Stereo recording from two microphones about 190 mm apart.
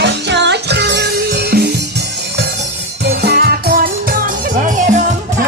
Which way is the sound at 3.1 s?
60° right (ahead or behind).